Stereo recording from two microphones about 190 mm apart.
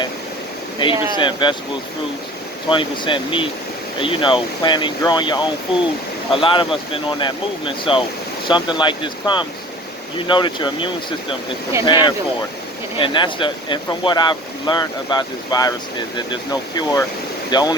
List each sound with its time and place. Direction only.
0.8 s speech: 25° left (ahead or behind)
2.6 s speech: 25° left (ahead or behind)